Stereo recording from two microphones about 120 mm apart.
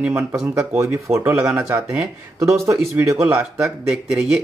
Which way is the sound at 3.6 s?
5° right (ahead or behind).